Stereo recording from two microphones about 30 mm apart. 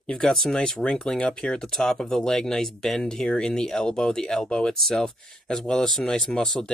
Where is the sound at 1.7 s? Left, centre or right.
Centre.